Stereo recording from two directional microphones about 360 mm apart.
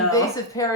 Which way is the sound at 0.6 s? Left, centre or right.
Centre.